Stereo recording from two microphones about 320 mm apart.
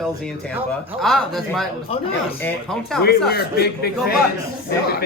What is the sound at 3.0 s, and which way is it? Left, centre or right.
Speech, left.